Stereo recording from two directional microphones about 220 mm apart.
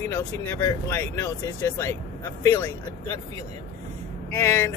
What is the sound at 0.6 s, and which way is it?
Speech, 10° left (ahead or behind).